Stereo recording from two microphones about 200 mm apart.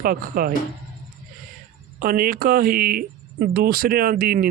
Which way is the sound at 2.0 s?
50° right (ahead or behind).